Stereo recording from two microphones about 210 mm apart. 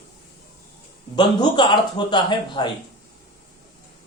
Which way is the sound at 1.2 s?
20° left (ahead or behind).